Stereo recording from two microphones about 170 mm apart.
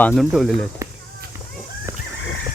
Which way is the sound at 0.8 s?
20° right (ahead or behind).